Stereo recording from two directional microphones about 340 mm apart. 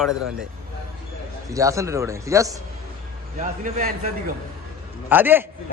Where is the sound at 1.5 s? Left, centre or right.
Centre.